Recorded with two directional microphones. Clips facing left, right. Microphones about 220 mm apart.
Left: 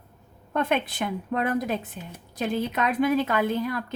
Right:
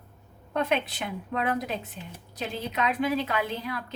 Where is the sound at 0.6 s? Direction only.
50° left (ahead or behind).